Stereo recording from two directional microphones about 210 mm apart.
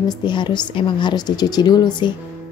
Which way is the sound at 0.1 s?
20° left (ahead or behind).